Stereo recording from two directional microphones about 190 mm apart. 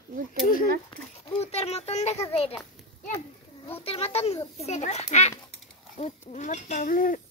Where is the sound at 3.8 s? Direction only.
30° left (ahead or behind).